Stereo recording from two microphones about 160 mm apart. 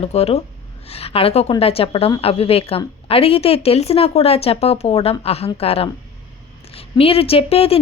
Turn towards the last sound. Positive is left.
turn(degrees=35)  # may be behind; listen again after turning